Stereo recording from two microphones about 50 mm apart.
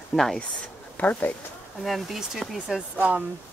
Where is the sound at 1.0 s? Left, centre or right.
Left.